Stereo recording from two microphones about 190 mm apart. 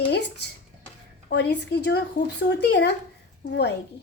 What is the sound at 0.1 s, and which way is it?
A woman's voice, 60° left (ahead or behind).